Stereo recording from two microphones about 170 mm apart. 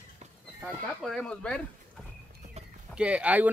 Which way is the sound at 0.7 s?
5° left (ahead or behind).